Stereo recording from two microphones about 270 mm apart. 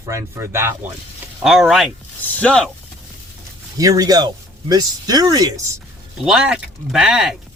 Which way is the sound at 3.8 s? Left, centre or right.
Centre.